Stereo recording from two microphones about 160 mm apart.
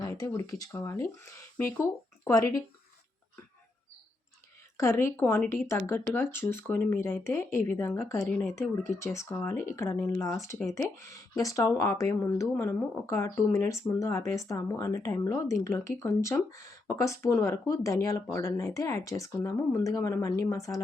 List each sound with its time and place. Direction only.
0.0 s speech: 20° left (ahead or behind)
4.8 s speech: 15° left (ahead or behind)